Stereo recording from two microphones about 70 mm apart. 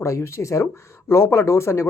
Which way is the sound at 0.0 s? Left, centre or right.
Left.